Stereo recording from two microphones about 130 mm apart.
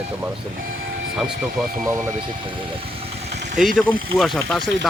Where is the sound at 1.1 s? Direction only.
5° right (ahead or behind).